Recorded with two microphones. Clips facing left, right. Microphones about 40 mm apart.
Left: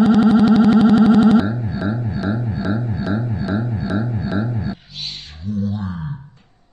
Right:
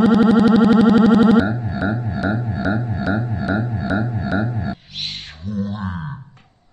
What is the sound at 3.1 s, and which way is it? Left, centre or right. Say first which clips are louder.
Music: right 2 dB; right.